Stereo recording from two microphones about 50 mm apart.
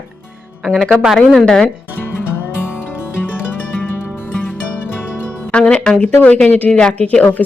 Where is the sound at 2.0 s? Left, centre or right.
Left.